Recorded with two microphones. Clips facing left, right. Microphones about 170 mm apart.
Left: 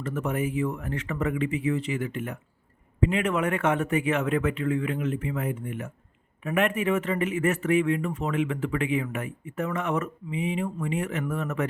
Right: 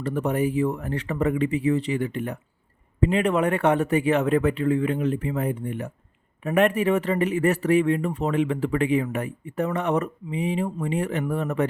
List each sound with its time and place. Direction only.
0.0 s speech: 35° right (ahead or behind)